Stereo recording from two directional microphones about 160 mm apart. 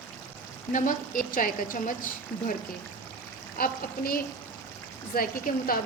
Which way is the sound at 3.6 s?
65° left (ahead or behind).